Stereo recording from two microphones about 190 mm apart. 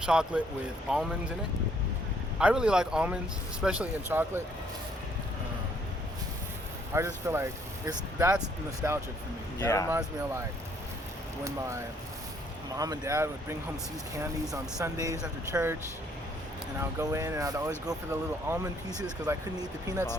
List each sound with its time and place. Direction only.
0.0 s speech: 5° right (ahead or behind)
2.4 s speech: 5° right (ahead or behind)
6.9 s speech: 15° right (ahead or behind)
9.6 s speech: 15° left (ahead or behind)
12.7 s speech: 20° right (ahead or behind)
17.0 s speech: 15° right (ahead or behind)